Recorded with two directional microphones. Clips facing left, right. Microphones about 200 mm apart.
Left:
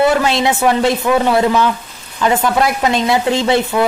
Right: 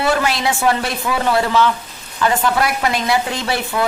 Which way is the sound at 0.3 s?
20° left (ahead or behind).